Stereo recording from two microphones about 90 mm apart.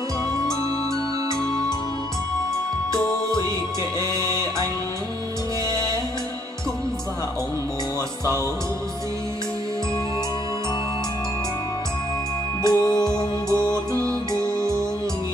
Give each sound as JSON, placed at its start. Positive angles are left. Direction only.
{"t": 4.2, "sound": "music", "side_deg": -35}
{"t": 5.7, "sound": "music", "side_deg": 50}
{"t": 12.6, "sound": "music", "side_deg": 45}